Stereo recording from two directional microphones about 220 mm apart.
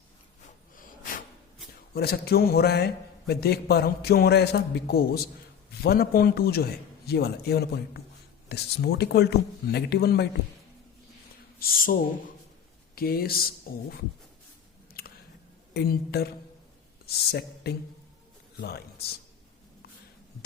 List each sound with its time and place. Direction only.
1.9 s a man's voice: 45° left (ahead or behind)
11.6 s speech: 40° left (ahead or behind)
13.0 s a man's voice: 45° left (ahead or behind)
15.0 s a sound: 45° left (ahead or behind)
15.7 s a man's voice: 45° left (ahead or behind)